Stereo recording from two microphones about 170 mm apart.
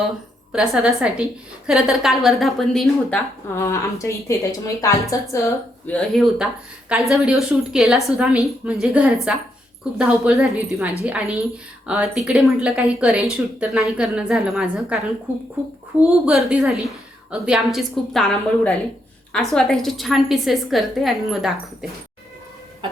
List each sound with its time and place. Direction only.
0.5 s speech: centre (ahead or behind)
3.5 s a woman's voice: 15° left (ahead or behind)
6.0 s speech: centre (ahead or behind)